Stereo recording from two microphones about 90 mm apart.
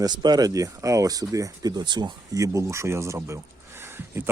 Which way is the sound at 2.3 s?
35° right (ahead or behind).